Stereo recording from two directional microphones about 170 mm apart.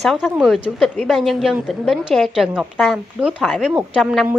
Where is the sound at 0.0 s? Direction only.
Centre (ahead or behind).